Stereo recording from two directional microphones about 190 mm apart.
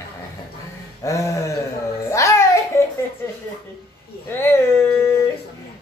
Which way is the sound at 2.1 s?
15° left (ahead or behind).